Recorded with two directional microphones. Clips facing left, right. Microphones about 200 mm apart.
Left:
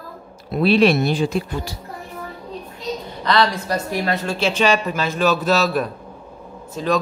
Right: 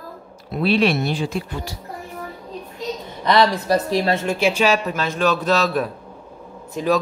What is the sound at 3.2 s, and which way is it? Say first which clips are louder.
A woman's voice: right 2 dB; 20° right (ahead or behind).